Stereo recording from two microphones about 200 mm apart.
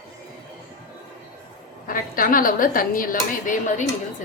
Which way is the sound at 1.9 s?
45° left (ahead or behind).